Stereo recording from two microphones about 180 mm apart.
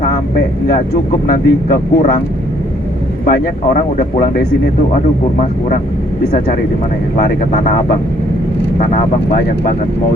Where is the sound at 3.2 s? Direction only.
55° left (ahead or behind).